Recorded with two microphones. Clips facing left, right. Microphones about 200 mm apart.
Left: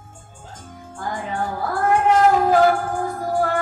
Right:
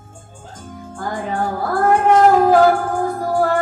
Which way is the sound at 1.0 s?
45° right (ahead or behind).